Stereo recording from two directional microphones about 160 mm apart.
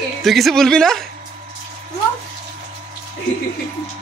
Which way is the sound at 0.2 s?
Centre (ahead or behind).